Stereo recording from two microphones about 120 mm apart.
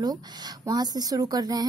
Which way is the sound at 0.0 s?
35° right (ahead or behind).